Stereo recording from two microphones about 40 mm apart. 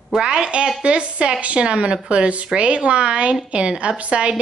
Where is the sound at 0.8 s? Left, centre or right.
Right.